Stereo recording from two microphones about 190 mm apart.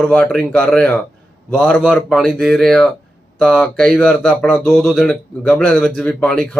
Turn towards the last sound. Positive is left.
turn(degrees=5)  # may be behind; listen again after turning